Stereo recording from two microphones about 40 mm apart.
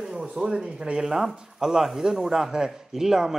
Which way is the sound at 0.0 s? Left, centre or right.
Centre.